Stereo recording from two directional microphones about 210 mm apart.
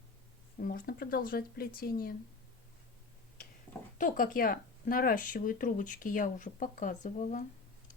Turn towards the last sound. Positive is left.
turn(degrees=35)  # may be behind; listen again after turning